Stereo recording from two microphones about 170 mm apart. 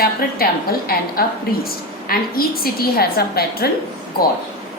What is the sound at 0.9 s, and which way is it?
A woman's voice, 65° left (ahead or behind).